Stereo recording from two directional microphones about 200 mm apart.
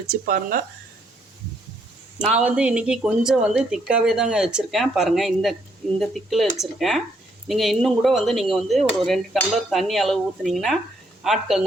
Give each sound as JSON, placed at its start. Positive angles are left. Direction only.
{"t": 0.1, "sound": "speech", "side_deg": -45}
{"t": 2.4, "sound": "speech", "side_deg": -5}